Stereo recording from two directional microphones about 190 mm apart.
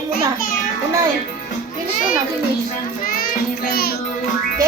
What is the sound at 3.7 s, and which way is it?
Music, 55° left (ahead or behind).